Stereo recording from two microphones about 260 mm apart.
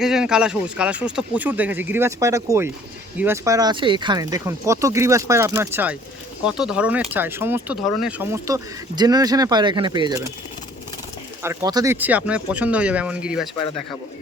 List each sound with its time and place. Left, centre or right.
0.0 s speech: centre
11.4 s speech: centre
13.6 s speech: centre